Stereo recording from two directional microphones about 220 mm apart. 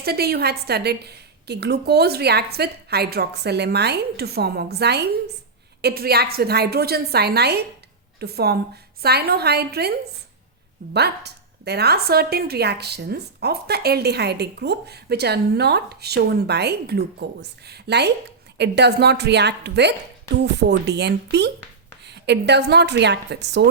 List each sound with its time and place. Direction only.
0.0 s speech: 45° right (ahead or behind)
10.9 s speech: 50° right (ahead or behind)